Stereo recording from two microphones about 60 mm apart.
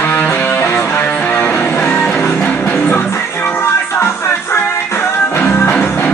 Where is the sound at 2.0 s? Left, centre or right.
Centre.